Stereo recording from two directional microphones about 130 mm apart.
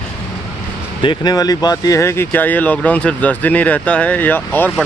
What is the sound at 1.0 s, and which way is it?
Speech, 35° left (ahead or behind).